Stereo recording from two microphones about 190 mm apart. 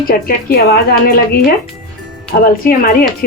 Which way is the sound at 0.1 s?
50° left (ahead or behind).